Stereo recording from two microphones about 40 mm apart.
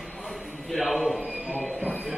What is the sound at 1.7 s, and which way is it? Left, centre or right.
Train wheels squealing, left.